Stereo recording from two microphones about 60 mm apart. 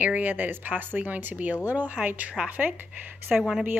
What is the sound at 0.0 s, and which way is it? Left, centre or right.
Speech, right.